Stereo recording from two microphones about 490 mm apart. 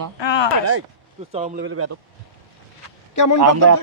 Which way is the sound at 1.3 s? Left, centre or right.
Centre.